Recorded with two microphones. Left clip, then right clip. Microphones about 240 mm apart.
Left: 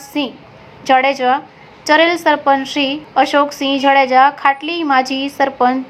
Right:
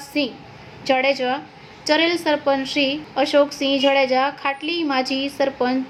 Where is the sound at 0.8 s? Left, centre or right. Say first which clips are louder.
Left 7 dB; centre.